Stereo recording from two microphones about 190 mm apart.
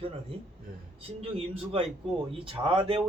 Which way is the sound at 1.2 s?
30° right (ahead or behind).